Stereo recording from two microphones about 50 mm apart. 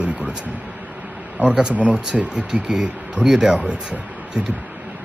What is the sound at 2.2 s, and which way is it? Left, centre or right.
Speech, centre.